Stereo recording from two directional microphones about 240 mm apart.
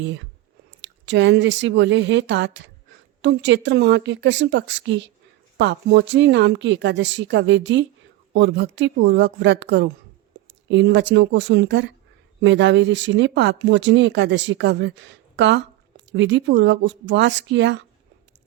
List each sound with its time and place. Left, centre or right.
0.0 s speech: right